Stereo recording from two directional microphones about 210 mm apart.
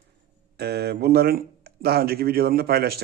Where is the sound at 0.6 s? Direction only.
50° right (ahead or behind).